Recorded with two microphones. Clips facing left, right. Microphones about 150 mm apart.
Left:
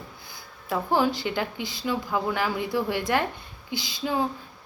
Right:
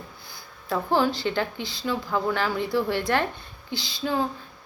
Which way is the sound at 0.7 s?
10° left (ahead or behind).